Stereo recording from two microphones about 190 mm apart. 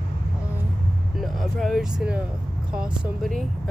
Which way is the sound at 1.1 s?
Centre (ahead or behind).